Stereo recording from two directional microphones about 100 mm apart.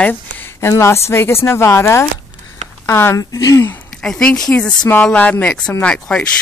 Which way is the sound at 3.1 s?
35° left (ahead or behind).